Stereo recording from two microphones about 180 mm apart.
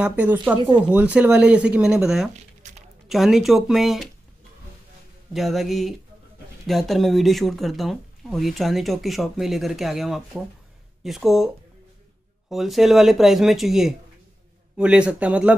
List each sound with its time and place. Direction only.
0.0 s speech: 10° right (ahead or behind)
2.3 s squish: 40° right (ahead or behind)
3.1 s speech: centre (ahead or behind)
5.3 s speech: centre (ahead or behind)